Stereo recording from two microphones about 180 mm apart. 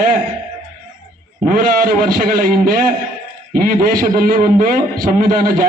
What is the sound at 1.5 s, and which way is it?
A man's voice, 50° right (ahead or behind).